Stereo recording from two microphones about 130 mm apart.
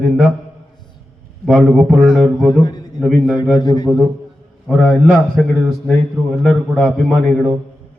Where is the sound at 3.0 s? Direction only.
Centre (ahead or behind).